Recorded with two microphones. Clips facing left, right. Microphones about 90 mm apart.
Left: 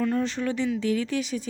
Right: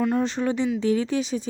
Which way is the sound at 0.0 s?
20° right (ahead or behind).